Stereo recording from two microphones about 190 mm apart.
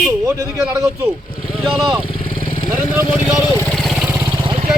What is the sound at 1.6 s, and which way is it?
Speech, centre (ahead or behind).